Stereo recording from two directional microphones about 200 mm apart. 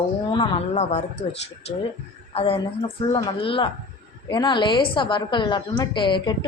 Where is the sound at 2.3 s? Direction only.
30° left (ahead or behind).